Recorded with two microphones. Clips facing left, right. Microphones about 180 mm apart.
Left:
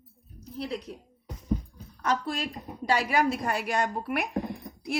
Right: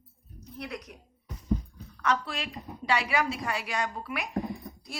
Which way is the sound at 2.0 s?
45° left (ahead or behind).